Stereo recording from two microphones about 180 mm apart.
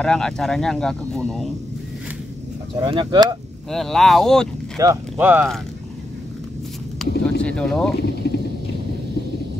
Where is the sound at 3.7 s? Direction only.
Centre (ahead or behind).